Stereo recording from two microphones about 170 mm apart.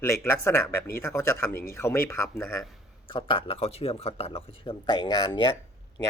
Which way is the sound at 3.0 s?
30° left (ahead or behind).